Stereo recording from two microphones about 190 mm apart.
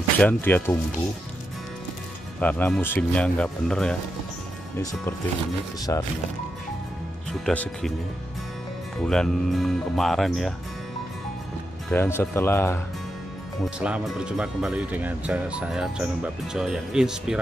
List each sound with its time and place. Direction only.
0.2 s speech: 10° left (ahead or behind)
2.4 s speech: 10° left (ahead or behind)
5.8 s speech: 20° left (ahead or behind)
7.4 s speech: 5° left (ahead or behind)
9.0 s speech: 5° left (ahead or behind)
11.9 s speech: 10° left (ahead or behind)
13.7 s speech: 5° right (ahead or behind)